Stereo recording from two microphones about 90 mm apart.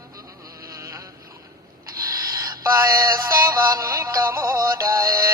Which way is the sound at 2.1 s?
40° right (ahead or behind).